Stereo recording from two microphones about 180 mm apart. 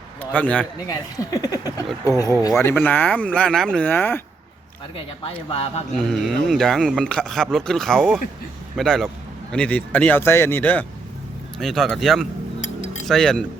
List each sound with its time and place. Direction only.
0.2 s speech: 10° left (ahead or behind)
0.9 s speech: 20° left (ahead or behind)
5.2 s speech: 35° left (ahead or behind)
6.0 s speech: centre (ahead or behind)